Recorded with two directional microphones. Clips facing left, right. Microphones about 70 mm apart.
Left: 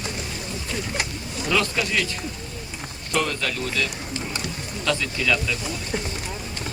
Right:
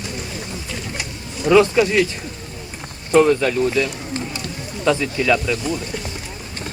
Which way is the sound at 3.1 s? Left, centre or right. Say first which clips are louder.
Right 11 dB; right.